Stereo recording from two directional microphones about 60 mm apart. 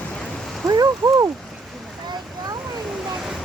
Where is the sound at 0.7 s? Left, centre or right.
Right.